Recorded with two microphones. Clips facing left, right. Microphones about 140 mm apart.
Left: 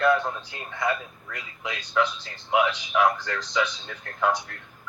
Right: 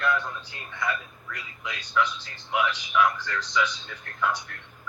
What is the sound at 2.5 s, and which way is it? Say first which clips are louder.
A man's voice: left 3 dB; 40° left (ahead or behind).